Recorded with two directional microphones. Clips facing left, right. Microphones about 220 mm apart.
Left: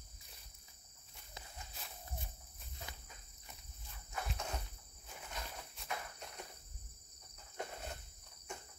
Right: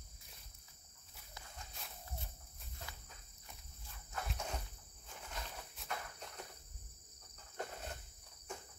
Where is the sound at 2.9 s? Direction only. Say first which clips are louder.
Left 1 dB; 20° left (ahead or behind).